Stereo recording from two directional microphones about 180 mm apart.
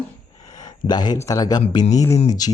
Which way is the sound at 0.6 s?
20° left (ahead or behind).